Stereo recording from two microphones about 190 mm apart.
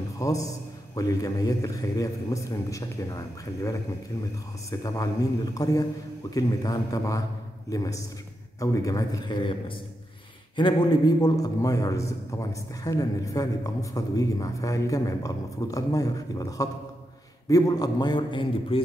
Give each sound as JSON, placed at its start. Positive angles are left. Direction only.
{"t": 0.2, "sound": "a man's voice", "side_deg": 15}
{"t": 4.6, "sound": "a man's voice", "side_deg": 20}